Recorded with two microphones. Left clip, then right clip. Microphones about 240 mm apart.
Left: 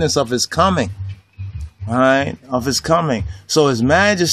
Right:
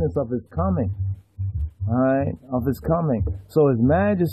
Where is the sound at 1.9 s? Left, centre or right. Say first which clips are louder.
Left 7 dB; centre.